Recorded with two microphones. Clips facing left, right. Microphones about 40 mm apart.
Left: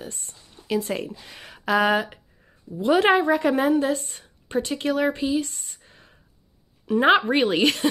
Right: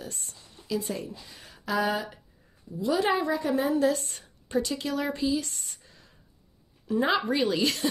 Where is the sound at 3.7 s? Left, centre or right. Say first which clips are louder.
Left 2 dB; left.